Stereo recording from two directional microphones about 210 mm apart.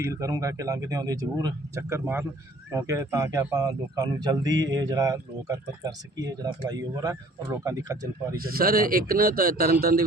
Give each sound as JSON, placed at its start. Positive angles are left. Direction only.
{"t": 0.0, "sound": "speech", "side_deg": -15}
{"t": 8.4, "sound": "speech", "side_deg": -45}